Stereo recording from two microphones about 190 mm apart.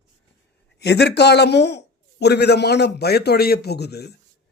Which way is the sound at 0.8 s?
60° left (ahead or behind).